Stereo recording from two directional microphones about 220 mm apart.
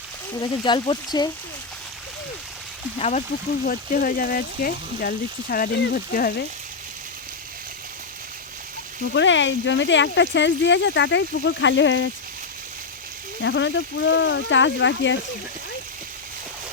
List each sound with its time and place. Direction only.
0.6 s speech: 20° left (ahead or behind)
3.0 s speech: 30° left (ahead or behind)
9.1 s speech: 55° left (ahead or behind)
13.4 s speech: 55° left (ahead or behind)